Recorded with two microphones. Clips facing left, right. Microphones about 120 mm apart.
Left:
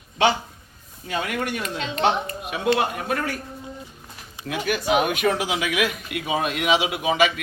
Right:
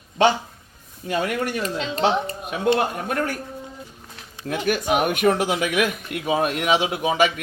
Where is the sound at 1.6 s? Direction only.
35° right (ahead or behind).